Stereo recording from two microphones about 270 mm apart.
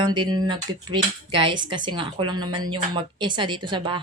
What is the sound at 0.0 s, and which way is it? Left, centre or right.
Speech, centre.